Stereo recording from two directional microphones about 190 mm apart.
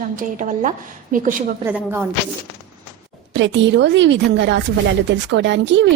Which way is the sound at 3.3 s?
70° right (ahead or behind).